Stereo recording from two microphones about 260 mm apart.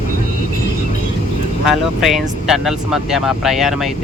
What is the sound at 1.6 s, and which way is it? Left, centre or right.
Speech, centre.